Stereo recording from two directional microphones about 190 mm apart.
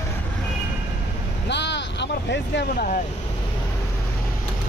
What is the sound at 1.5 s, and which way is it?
Vehicle, 65° left (ahead or behind).